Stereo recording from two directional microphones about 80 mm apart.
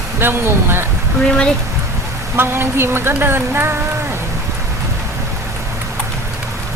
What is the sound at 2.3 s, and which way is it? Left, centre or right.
A man's voice, right.